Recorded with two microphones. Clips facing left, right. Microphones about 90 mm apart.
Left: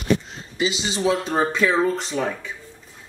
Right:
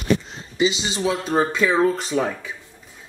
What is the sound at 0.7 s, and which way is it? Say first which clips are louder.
Speech: left 1 dB; centre (ahead or behind).